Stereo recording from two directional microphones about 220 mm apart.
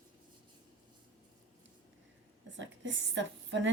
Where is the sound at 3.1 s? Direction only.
55° right (ahead or behind).